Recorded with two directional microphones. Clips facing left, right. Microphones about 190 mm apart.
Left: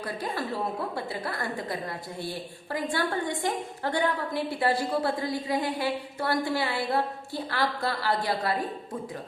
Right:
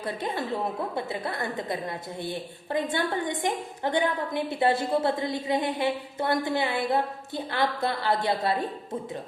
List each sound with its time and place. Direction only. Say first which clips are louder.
0.0 s a woman's voice: right 2 dB; 20° right (ahead or behind)